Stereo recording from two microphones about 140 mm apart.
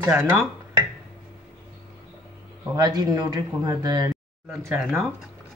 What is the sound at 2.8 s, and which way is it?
Speech, 30° right (ahead or behind).